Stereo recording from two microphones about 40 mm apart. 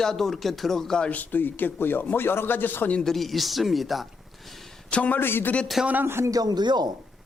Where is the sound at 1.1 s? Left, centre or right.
Left.